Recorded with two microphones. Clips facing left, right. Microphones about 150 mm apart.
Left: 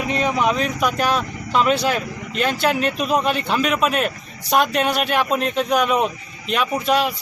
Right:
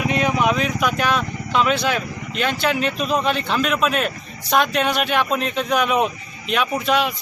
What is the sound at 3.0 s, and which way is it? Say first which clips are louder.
A man's voice: left 1 dB; 5° left (ahead or behind).